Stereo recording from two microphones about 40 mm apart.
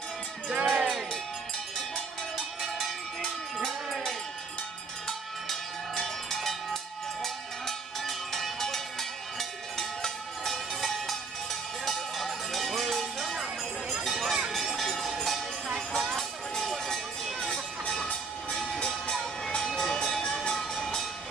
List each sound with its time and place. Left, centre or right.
0.6 s music: right
2.3 s cowbell: centre
5.5 s cowbell: centre
11.8 s music: centre
13.3 s music: centre
14.0 s run: centre
14.9 s a sound: centre
18.5 s train: centre
18.9 s vehicle: centre
19.6 s music: centre